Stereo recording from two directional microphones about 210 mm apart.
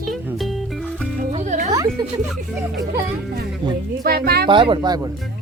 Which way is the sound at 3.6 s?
20° right (ahead or behind).